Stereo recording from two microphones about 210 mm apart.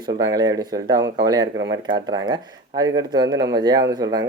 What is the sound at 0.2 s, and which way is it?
Speech, 20° right (ahead or behind).